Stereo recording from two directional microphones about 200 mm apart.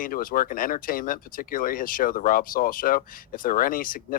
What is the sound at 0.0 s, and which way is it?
Speech, 45° left (ahead or behind).